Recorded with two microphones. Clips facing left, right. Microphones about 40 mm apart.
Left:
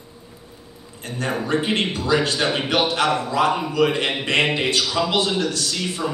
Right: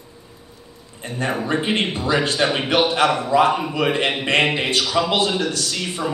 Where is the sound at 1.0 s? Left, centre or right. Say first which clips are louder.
Right 2 dB; right.